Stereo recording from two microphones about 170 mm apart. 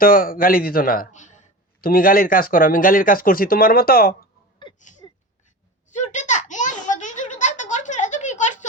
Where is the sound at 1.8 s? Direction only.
55° left (ahead or behind).